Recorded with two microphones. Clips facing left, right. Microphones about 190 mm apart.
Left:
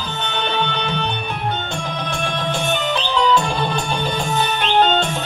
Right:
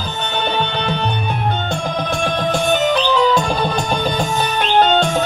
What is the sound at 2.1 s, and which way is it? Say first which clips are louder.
Music: right 4 dB; 40° right (ahead or behind).